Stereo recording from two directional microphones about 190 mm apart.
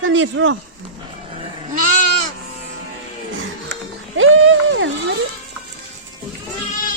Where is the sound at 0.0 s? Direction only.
90° right.